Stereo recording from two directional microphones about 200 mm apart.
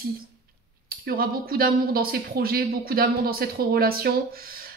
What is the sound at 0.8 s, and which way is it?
Speech, 45° right (ahead or behind).